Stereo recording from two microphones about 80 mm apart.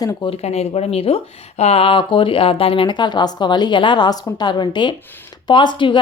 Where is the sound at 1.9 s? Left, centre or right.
Left.